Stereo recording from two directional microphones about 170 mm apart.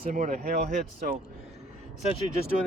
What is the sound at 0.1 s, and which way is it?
Speech, 50° right (ahead or behind).